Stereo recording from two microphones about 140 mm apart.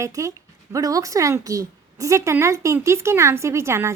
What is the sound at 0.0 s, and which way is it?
Speech, 20° right (ahead or behind).